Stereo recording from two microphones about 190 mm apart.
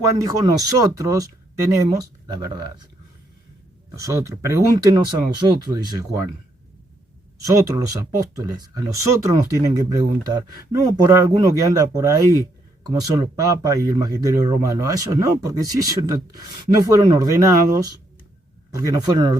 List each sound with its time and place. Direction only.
0.2 s speech: 20° right (ahead or behind)
3.9 s speech: 15° right (ahead or behind)
7.4 s speech: 15° right (ahead or behind)